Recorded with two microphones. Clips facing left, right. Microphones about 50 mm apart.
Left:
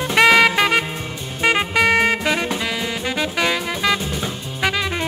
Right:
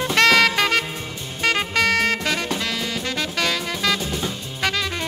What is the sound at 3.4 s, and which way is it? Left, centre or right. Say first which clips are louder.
Music: left 2 dB; centre.